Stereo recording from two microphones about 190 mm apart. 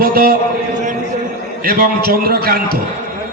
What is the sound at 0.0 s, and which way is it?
Speech, 50° right (ahead or behind).